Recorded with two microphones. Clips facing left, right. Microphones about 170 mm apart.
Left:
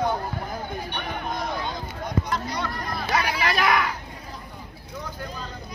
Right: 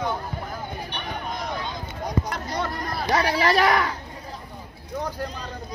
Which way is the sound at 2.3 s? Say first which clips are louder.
Even; 50° right (ahead or behind).